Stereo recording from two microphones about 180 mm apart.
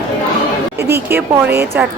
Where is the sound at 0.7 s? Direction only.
15° right (ahead or behind).